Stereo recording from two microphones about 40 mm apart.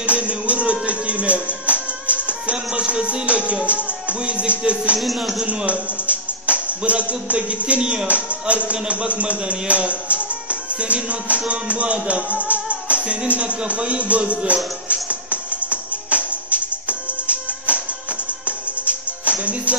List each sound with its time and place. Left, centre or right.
0.0 s music: right
4.9 s speech: centre
5.5 s speech: right
13.3 s music: right